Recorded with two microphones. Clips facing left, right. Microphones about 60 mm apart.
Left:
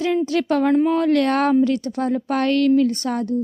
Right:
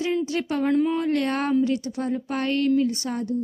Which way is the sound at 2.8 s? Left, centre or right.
Left.